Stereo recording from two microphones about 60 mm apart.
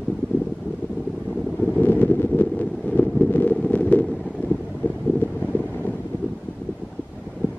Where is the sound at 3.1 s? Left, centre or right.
Left.